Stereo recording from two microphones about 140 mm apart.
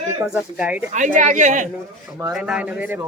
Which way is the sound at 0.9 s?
65° right (ahead or behind).